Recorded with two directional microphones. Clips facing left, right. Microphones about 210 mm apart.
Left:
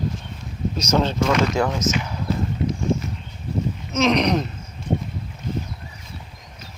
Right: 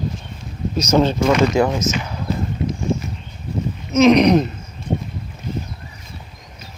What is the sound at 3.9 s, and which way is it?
Chicken, 10° right (ahead or behind).